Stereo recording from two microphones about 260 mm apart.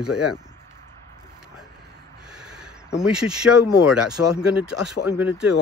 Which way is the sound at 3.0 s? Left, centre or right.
Centre.